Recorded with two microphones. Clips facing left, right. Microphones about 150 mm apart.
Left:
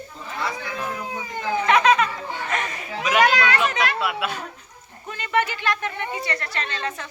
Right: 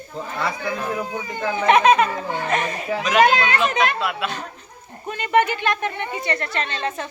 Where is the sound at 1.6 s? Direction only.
20° right (ahead or behind).